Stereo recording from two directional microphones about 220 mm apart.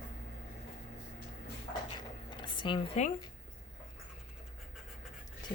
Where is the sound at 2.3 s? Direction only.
20° left (ahead or behind).